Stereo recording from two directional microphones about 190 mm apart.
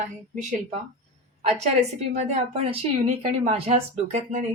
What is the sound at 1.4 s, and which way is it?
Speech, 35° right (ahead or behind).